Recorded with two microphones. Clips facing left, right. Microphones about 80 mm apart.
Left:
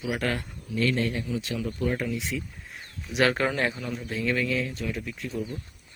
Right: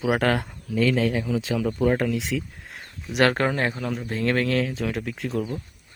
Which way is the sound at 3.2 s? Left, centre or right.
Right.